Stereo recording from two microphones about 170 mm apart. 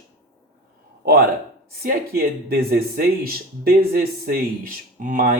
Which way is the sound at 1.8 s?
65° right (ahead or behind).